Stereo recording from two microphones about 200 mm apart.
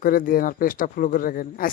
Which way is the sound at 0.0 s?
45° left (ahead or behind).